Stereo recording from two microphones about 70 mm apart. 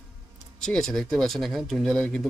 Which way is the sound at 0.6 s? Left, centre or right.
Centre.